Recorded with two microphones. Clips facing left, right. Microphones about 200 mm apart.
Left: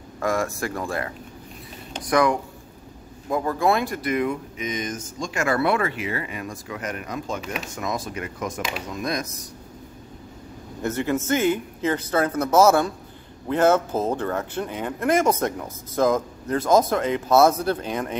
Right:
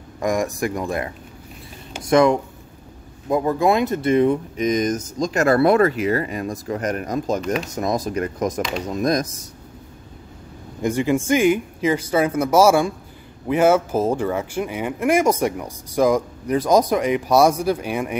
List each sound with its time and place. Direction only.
0.2 s speech: 15° right (ahead or behind); by 7.4 s 40° right (ahead or behind)
7.4 s speech: centre (ahead or behind)
7.7 s speech: 40° right (ahead or behind)
10.8 s speech: 15° right (ahead or behind)